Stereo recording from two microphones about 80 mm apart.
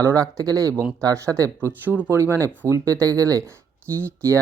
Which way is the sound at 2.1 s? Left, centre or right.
Right.